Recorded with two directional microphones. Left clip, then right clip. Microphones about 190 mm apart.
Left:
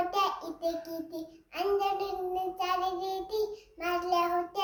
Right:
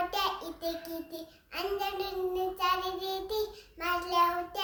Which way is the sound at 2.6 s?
20° right (ahead or behind).